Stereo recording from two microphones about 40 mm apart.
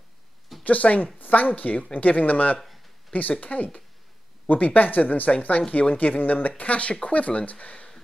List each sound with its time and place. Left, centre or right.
0.7 s speech: left
6.6 s speech: left